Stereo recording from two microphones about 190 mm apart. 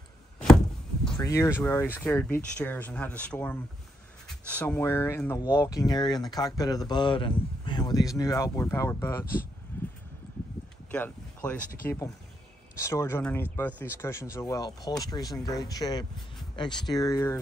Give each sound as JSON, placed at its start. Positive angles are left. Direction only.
{"t": 1.1, "sound": "speech", "side_deg": 15}
{"t": 9.7, "sound": "a sound", "side_deg": 10}
{"t": 10.9, "sound": "speech", "side_deg": 5}